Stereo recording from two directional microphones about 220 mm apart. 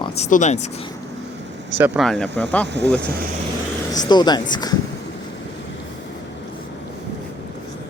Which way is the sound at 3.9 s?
20° left (ahead or behind).